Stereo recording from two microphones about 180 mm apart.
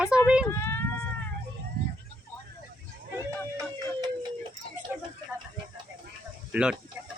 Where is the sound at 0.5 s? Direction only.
15° left (ahead or behind).